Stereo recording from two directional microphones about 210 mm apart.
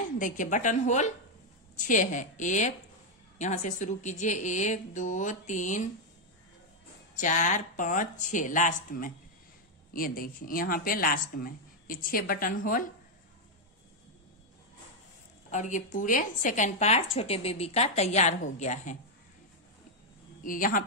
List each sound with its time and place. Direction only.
0.2 s speech: 35° left (ahead or behind)
7.2 s a woman's voice: 35° left (ahead or behind)
15.5 s speech: 35° left (ahead or behind)
20.4 s speech: 40° left (ahead or behind)